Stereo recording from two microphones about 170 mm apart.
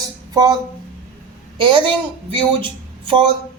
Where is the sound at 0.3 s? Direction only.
25° right (ahead or behind).